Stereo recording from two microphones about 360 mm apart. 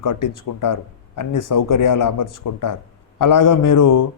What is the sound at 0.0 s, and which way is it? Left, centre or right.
Speech, left.